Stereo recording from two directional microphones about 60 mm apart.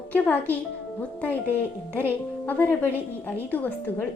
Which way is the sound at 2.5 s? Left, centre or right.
Left.